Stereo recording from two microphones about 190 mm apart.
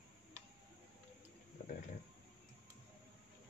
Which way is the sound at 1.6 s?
40° left (ahead or behind).